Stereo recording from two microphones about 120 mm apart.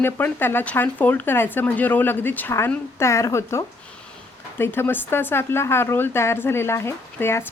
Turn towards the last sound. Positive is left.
turn(degrees=20)  # may be behind; listen again after turning